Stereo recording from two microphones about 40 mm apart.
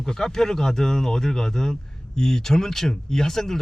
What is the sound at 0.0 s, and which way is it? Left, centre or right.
Speech, centre.